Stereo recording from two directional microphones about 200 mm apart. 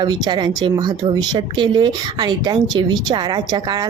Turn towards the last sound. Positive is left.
turn(degrees=-20)  # may be behind; listen again after turning